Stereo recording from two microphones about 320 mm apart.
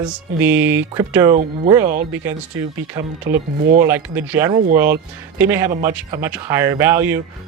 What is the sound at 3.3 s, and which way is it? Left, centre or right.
Speech, right.